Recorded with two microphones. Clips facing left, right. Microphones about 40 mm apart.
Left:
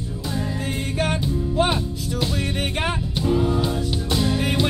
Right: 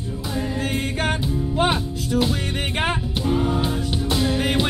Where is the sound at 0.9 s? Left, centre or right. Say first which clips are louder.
Even; right.